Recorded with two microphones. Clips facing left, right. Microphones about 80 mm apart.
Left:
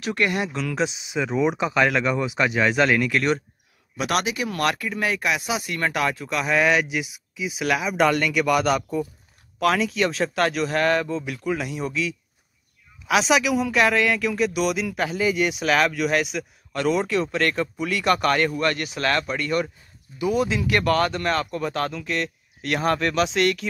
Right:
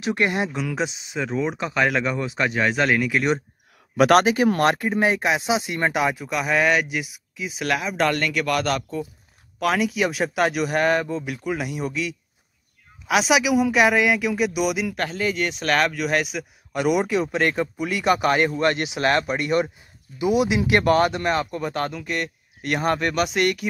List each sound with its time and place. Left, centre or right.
0.0 s speech: right
0.8 s speech: centre
3.9 s speech: right
4.2 s speech: right; by 9.0 s centre
9.6 s speech: centre
16.7 s speech: centre